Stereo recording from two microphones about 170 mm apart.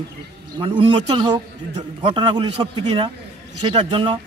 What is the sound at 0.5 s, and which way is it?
A man's voice, 30° right (ahead or behind).